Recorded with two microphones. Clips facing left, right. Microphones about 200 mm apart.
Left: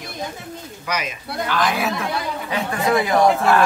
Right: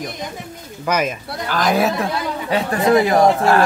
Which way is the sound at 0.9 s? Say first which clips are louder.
Right 7 dB; 50° right (ahead or behind).